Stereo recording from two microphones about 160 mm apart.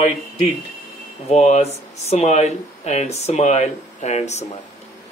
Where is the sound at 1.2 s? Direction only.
45° left (ahead or behind).